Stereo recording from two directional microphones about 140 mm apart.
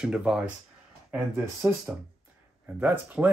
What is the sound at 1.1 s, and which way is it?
Speech, 15° right (ahead or behind).